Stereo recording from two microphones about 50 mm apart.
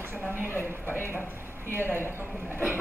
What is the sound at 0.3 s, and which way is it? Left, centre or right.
Speech, left.